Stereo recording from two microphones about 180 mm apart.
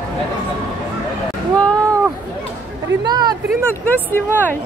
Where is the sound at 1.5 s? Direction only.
5° left (ahead or behind).